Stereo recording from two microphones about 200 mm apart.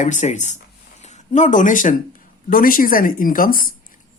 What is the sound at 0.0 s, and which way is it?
A woman's voice, 35° left (ahead or behind).